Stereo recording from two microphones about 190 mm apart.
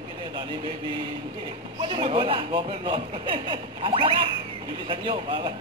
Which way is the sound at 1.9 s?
25° right (ahead or behind).